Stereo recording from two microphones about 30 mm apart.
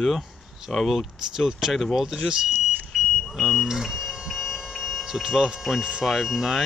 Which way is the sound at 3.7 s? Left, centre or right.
Centre.